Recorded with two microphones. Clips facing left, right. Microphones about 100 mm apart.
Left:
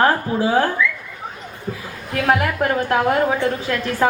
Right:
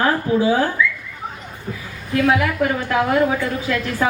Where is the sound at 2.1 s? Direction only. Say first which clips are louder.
Right 1 dB; 50° left (ahead or behind).